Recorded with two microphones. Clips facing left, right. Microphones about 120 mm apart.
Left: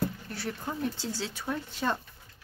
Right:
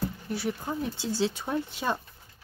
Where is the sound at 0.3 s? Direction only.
10° right (ahead or behind).